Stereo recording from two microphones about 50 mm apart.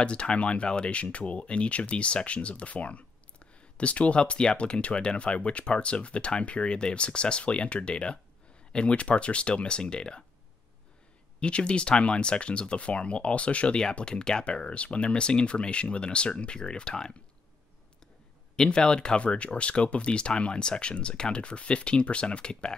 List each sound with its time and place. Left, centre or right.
0.0 s speech: left
11.3 s speech: left
18.6 s speech: centre